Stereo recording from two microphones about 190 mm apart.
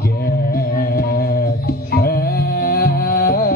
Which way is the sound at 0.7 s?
50° left (ahead or behind).